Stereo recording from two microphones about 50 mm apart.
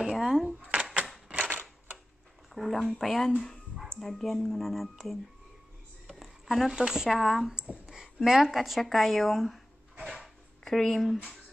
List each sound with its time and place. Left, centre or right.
0.1 s speech: centre
1.3 s typewriter: right
2.5 s speech: centre
6.4 s speech: centre
7.1 s speech: centre
10.0 s a sound: centre
10.6 s speech: centre